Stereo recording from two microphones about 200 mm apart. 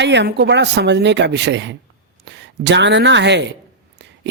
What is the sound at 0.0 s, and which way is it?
Speech, 60° right (ahead or behind).